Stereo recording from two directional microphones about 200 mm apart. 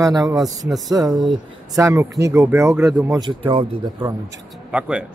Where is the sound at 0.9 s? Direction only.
20° right (ahead or behind).